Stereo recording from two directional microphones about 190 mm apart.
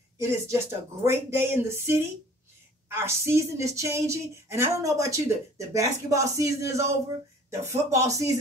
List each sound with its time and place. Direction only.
0.2 s speech: 15° right (ahead or behind)